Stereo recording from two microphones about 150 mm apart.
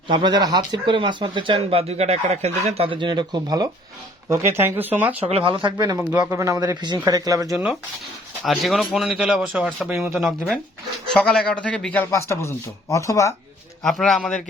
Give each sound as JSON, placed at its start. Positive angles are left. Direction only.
{"t": 0.1, "sound": "speech", "side_deg": -30}
{"t": 4.3, "sound": "speech", "side_deg": -15}
{"t": 5.3, "sound": "speech", "side_deg": -35}
{"t": 6.0, "sound": "speech", "side_deg": -10}
{"t": 8.4, "sound": "a man's voice", "side_deg": 0}
{"t": 11.2, "sound": "a man's voice", "side_deg": 5}
{"t": 12.1, "sound": "speech", "side_deg": 20}
{"t": 13.8, "sound": "a man's voice", "side_deg": 5}